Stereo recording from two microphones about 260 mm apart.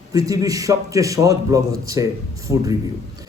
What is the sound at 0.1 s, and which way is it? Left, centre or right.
A man's voice, centre.